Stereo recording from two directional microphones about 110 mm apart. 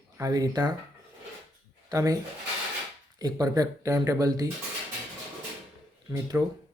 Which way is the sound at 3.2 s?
35° right (ahead or behind).